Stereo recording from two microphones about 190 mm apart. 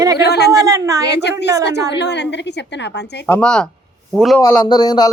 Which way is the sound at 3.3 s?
5° left (ahead or behind).